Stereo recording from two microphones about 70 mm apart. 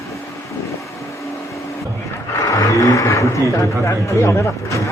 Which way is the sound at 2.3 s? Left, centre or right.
Left.